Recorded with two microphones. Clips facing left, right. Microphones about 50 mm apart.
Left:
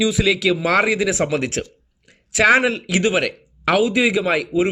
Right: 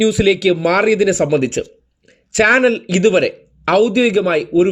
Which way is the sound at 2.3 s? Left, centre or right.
Centre.